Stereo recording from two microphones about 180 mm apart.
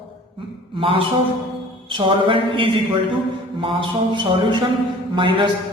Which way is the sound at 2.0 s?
30° right (ahead or behind).